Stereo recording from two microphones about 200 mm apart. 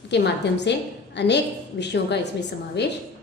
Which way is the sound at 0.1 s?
60° left (ahead or behind).